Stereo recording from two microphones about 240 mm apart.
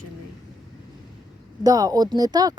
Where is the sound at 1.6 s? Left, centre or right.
Centre.